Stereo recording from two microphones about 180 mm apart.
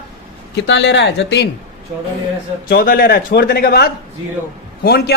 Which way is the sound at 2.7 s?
60° left (ahead or behind).